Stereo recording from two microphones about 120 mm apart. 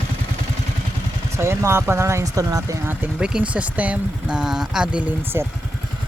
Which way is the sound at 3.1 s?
5° right (ahead or behind).